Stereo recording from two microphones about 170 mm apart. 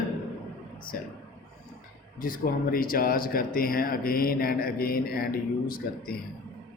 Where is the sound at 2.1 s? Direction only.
55° left (ahead or behind).